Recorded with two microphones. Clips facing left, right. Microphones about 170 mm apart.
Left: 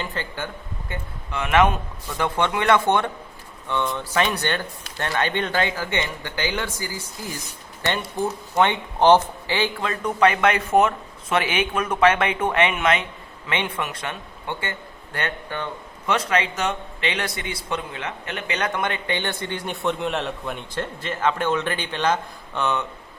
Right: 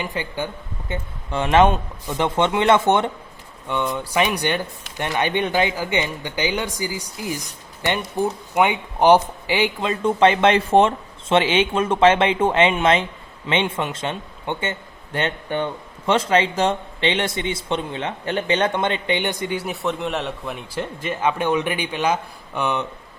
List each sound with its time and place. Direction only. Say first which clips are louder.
0.0 s speech: right 3 dB; 15° right (ahead or behind)
1.3 s a man's voice: right 3 dB; 30° right (ahead or behind)